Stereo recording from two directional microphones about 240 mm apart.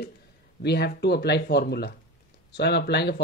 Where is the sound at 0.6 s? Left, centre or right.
Left.